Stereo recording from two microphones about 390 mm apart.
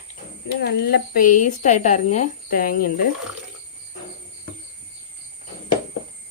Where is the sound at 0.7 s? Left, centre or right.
Left.